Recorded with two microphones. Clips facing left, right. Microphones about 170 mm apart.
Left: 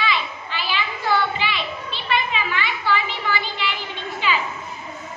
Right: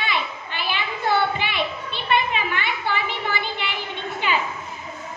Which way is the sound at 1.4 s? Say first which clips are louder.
Right 1 dB; 55° right (ahead or behind).